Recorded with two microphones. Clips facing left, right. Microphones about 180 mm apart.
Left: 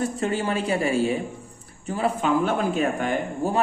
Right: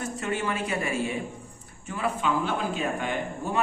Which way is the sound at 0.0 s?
35° left (ahead or behind).